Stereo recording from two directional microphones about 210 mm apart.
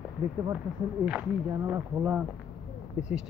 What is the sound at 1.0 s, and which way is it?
Speech, 5° right (ahead or behind).